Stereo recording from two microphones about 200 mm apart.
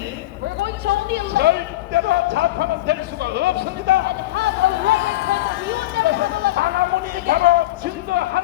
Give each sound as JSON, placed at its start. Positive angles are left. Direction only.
{"t": 0.6, "sound": "a man's voice", "side_deg": -55}
{"t": 4.9, "sound": "a sound", "side_deg": -55}
{"t": 7.3, "sound": "a man's voice", "side_deg": -45}